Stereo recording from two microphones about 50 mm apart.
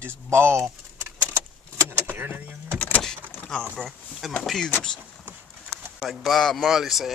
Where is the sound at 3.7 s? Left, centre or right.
Centre.